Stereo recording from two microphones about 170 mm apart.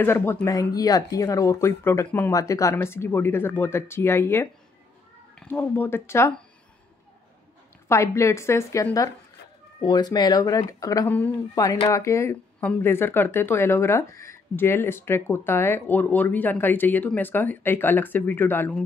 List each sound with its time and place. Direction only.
0.0 s speech: 15° left (ahead or behind)
7.9 s speech: 15° left (ahead or behind)